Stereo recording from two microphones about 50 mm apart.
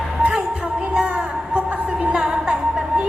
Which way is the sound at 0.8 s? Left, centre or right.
Right.